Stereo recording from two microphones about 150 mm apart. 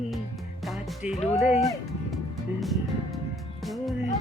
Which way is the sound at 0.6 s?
Centre (ahead or behind).